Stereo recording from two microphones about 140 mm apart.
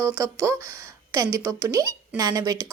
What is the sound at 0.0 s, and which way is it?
A woman's voice, 20° right (ahead or behind).